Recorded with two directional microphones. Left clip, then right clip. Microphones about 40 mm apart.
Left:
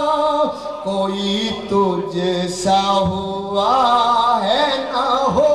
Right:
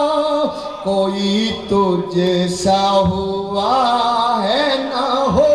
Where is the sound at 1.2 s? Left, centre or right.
Left.